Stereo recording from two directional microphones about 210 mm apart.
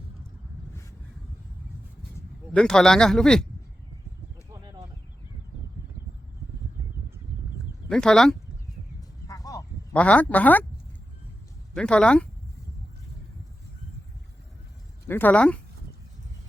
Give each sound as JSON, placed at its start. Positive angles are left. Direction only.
{"t": 2.5, "sound": "speech", "side_deg": 5}
{"t": 4.5, "sound": "a sound", "side_deg": -15}
{"t": 7.9, "sound": "speech", "side_deg": 5}
{"t": 9.2, "sound": "a sound", "side_deg": 15}
{"t": 11.7, "sound": "speech", "side_deg": 5}
{"t": 15.0, "sound": "speech", "side_deg": 10}